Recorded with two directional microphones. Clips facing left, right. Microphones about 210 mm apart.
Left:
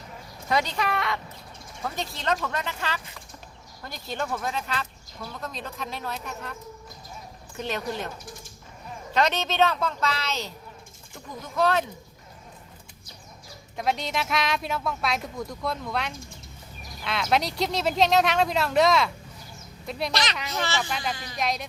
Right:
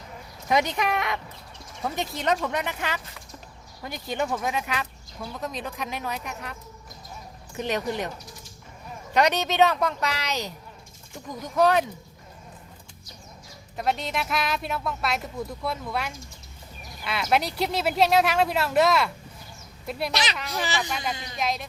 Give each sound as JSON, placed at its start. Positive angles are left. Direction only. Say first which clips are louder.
{"t": 0.4, "sound": "a woman's voice", "louder": "right 2 dB", "side_deg": -20}
{"t": 9.1, "sound": "a woman's voice", "louder": "right 2 dB", "side_deg": -15}
{"t": 13.7, "sound": "a woman's voice", "louder": "even", "side_deg": 0}
{"t": 21.3, "sound": "speech", "louder": "even", "side_deg": 0}